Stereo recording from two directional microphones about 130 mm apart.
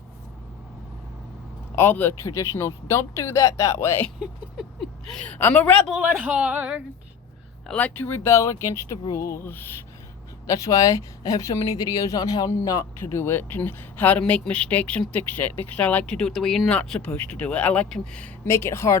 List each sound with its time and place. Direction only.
1.7 s a woman's voice: 15° left (ahead or behind)
4.2 s speech: centre (ahead or behind)
5.9 s speech: 10° right (ahead or behind)
7.7 s a woman's voice: 10° left (ahead or behind)
10.4 s a woman's voice: 25° left (ahead or behind); by 18.3 s 5° left (ahead or behind)
18.4 s a woman's voice: 20° left (ahead or behind)